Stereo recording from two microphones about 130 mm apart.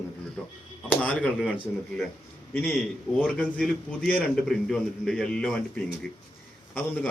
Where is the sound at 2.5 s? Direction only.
15° left (ahead or behind).